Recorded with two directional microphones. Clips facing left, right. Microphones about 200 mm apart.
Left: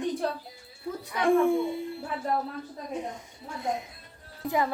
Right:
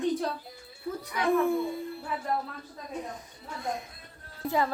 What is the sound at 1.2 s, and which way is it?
Speech, 25° left (ahead or behind).